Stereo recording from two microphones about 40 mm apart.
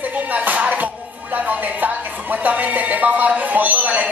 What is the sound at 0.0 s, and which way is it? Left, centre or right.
Music, right.